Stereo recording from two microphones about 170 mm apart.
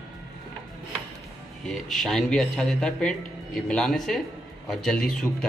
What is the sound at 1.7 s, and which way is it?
A man's voice, centre (ahead or behind).